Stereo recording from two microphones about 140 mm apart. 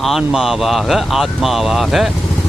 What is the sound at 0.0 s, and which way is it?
Speech, centre (ahead or behind).